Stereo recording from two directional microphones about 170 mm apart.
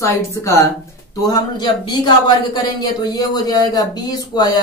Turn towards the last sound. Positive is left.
turn(degrees=25)  # may be behind; listen again after turning